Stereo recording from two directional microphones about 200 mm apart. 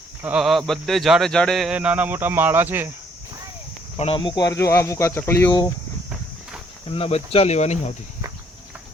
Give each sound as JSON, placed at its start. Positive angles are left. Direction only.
{"t": 0.2, "sound": "a man's voice", "side_deg": -5}
{"t": 3.9, "sound": "speech", "side_deg": 30}
{"t": 6.8, "sound": "speech", "side_deg": 30}